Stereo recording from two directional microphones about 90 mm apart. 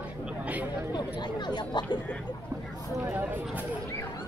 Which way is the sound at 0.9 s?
55° left (ahead or behind).